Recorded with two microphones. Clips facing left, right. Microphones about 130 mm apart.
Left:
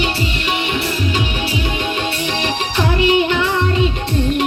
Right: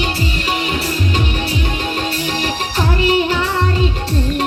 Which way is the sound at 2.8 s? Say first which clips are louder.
Left 1 dB; 40° right (ahead or behind).